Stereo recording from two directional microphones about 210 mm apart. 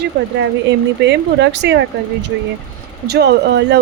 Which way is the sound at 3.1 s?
55° right (ahead or behind).